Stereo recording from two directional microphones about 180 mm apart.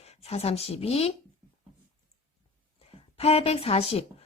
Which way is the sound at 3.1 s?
35° left (ahead or behind).